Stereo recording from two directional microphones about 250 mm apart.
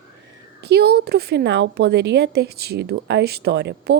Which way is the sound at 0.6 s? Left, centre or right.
Right.